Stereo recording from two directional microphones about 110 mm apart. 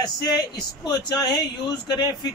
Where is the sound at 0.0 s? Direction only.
35° left (ahead or behind).